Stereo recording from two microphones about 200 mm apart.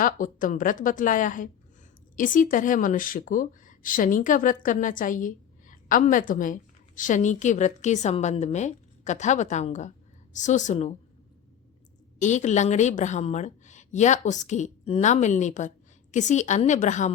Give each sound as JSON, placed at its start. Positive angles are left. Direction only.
{"t": 0.0, "sound": "speech", "side_deg": 40}
{"t": 12.2, "sound": "speech", "side_deg": 35}